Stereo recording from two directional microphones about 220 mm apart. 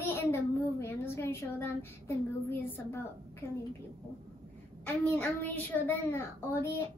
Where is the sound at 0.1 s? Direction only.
10° left (ahead or behind).